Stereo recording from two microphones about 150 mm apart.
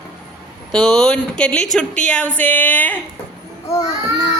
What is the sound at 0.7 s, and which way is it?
Speech, 5° left (ahead or behind).